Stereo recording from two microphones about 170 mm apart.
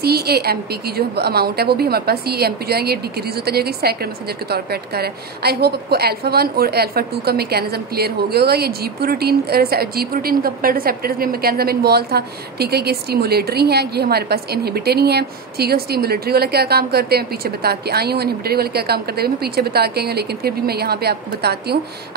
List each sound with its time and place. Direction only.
0.0 s a woman's voice: 70° right (ahead or behind)